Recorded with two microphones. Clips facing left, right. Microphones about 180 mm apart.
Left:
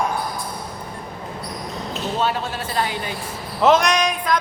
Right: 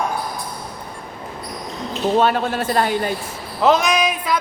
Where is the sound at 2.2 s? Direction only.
55° right (ahead or behind).